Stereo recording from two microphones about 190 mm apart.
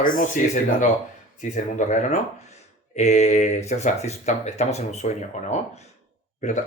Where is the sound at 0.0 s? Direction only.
45° left (ahead or behind).